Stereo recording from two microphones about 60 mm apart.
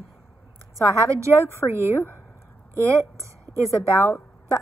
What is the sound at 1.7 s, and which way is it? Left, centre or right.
Speech, right.